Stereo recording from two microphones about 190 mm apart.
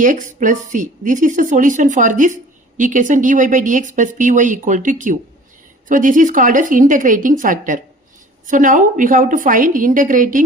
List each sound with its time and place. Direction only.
0.0 s a woman's voice: 45° right (ahead or behind)